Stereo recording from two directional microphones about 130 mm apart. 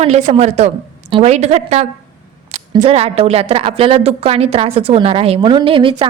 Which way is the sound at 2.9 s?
50° right (ahead or behind).